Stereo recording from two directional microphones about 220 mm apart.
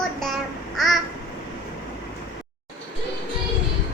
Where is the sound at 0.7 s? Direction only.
Centre (ahead or behind).